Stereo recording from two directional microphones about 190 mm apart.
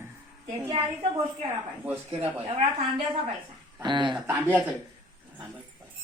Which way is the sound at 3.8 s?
25° right (ahead or behind).